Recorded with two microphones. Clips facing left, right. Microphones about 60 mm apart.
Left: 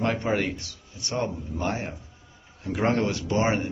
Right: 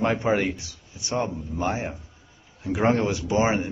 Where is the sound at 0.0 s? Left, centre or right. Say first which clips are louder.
Right 3 dB; centre.